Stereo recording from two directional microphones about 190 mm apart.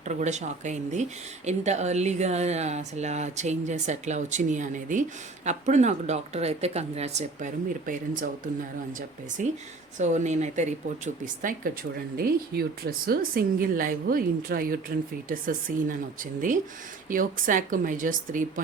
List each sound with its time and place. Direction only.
0.0 s speech: 40° right (ahead or behind)
17.1 s speech: 45° right (ahead or behind)